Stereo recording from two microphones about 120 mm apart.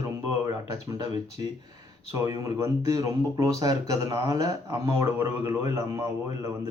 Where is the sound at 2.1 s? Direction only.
30° right (ahead or behind).